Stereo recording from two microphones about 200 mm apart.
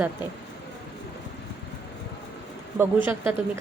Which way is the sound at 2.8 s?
10° right (ahead or behind).